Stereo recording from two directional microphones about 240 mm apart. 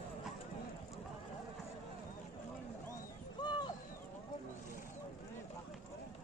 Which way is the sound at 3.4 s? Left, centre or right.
Centre.